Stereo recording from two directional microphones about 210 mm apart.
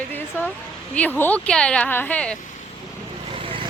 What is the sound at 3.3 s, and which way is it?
Vehicle, 25° right (ahead or behind).